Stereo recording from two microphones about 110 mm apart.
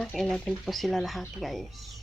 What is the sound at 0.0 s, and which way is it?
Speech, centre (ahead or behind).